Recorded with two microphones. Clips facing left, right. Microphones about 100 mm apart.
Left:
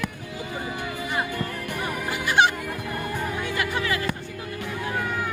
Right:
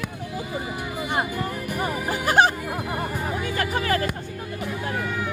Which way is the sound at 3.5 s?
40° right (ahead or behind).